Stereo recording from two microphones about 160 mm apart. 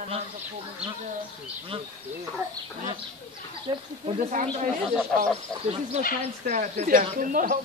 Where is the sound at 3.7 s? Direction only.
30° right (ahead or behind).